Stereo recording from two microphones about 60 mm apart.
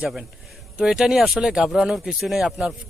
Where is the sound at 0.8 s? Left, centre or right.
Centre.